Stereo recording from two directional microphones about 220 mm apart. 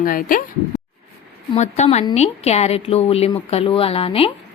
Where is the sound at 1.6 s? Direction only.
30° left (ahead or behind).